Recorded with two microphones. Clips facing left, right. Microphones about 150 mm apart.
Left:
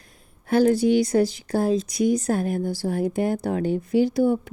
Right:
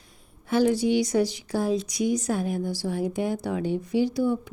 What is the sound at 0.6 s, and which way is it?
Speech, 50° left (ahead or behind).